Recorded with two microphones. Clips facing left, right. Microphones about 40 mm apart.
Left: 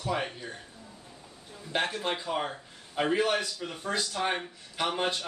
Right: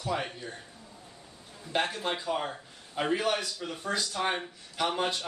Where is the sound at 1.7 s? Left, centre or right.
Centre.